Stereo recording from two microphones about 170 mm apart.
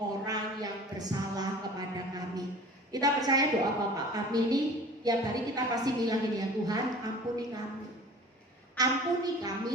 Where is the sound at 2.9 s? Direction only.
20° right (ahead or behind).